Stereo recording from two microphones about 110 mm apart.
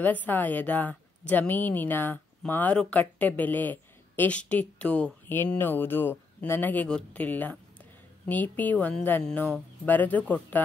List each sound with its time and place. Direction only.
0.0 s a woman's voice: 15° left (ahead or behind)